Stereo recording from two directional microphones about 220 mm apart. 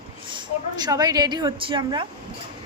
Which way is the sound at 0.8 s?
15° right (ahead or behind).